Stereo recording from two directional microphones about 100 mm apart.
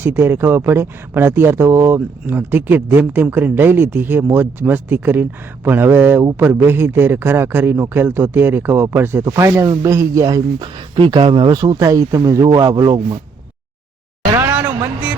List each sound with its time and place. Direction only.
0.0 s speech: 25° right (ahead or behind)
9.3 s speech: 35° right (ahead or behind)
11.1 s speech: 60° right (ahead or behind)
11.6 s speech: 35° right (ahead or behind)
14.5 s a sound: 15° right (ahead or behind)